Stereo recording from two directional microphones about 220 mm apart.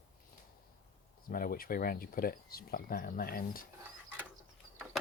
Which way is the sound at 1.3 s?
40° left (ahead or behind).